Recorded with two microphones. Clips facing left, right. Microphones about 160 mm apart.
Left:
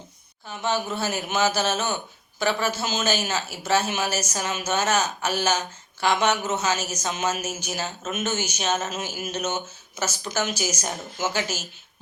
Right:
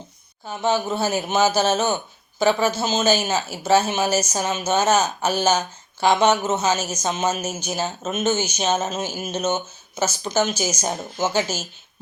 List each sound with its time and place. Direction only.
0.4 s a woman's voice: 30° right (ahead or behind)